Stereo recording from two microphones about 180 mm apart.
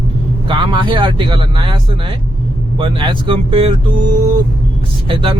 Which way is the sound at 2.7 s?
30° right (ahead or behind).